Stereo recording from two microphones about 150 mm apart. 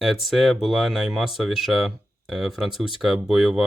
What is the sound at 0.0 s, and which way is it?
Speech, centre (ahead or behind).